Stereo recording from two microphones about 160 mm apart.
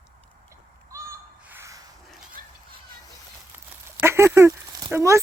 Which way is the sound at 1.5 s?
20° right (ahead or behind).